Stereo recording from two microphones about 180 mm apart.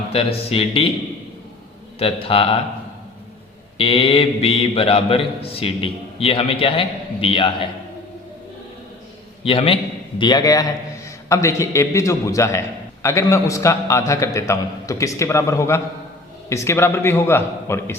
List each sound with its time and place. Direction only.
0.1 s speech: 35° left (ahead or behind)
2.0 s speech: 30° left (ahead or behind)
3.8 s speech: 30° left (ahead or behind)
9.4 s a man's voice: 30° left (ahead or behind); by 17.9 s 15° left (ahead or behind)